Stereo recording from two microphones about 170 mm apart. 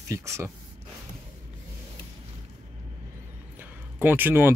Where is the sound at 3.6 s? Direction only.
10° right (ahead or behind).